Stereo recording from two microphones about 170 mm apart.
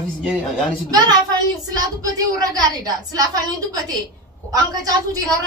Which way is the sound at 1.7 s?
20° right (ahead or behind).